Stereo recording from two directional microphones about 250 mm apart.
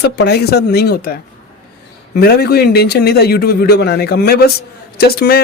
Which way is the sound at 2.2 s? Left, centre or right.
Left.